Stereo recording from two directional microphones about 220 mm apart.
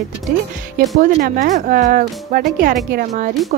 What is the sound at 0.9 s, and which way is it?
Speech, 40° right (ahead or behind).